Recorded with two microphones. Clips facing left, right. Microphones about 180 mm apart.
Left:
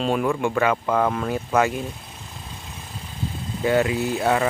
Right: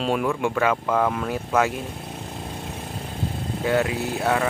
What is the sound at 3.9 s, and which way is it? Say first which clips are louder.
Speech: left 3 dB; 55° right (ahead or behind).